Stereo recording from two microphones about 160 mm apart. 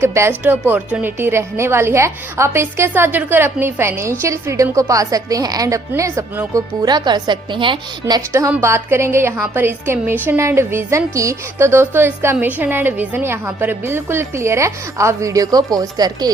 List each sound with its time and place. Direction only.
0.0 s a woman's voice: 15° right (ahead or behind)
6.8 s a woman's voice: 25° right (ahead or behind)
8.3 s a woman's voice: 15° right (ahead or behind)